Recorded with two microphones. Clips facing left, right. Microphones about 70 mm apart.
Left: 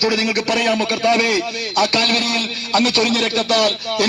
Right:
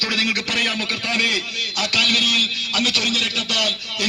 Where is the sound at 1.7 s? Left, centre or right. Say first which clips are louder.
Left 6 dB; left.